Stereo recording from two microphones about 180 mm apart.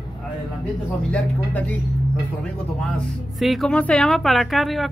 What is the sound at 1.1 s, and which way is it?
Speech, 5° left (ahead or behind).